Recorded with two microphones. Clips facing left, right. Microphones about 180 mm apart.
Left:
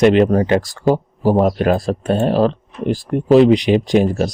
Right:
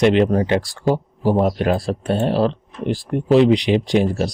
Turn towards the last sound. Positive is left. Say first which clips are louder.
# left 3 dB
turn(degrees=45)  # may be behind; listen again after turning